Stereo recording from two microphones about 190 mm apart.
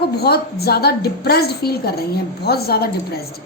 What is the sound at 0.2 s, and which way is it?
A woman's voice, 55° left (ahead or behind).